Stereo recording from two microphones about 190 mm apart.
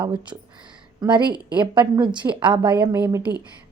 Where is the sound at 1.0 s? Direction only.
25° right (ahead or behind).